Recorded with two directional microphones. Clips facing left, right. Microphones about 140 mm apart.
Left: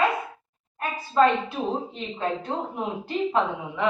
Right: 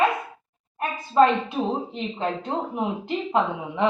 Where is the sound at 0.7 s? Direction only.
20° right (ahead or behind).